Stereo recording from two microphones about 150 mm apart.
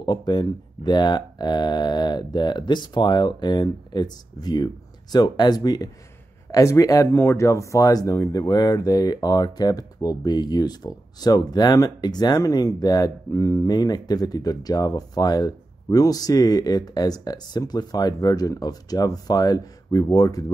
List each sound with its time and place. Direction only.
0.0 s speech: 30° left (ahead or behind)